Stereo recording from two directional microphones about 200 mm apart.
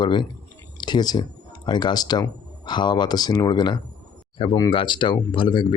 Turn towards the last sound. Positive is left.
turn(degrees=25)  # may be behind; listen again after turning